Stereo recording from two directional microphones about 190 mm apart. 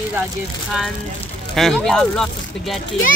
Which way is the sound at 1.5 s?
Centre (ahead or behind).